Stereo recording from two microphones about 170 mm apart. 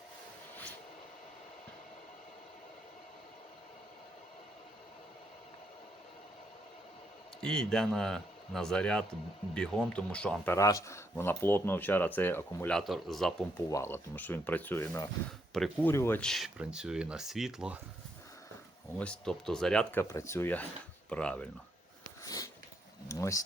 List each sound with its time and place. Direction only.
0.5 s a sound: 10° left (ahead or behind)
7.4 s speech: 5° left (ahead or behind)
13.7 s speech: 15° left (ahead or behind)
15.5 s speech: centre (ahead or behind)
15.9 s speech: 15° left (ahead or behind); by 17.7 s 5° right (ahead or behind)
18.9 s speech: 5° left (ahead or behind)
22.2 s biting: 20° left (ahead or behind)
23.0 s speech: 20° left (ahead or behind)